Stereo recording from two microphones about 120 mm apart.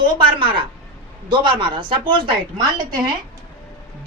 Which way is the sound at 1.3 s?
40° right (ahead or behind).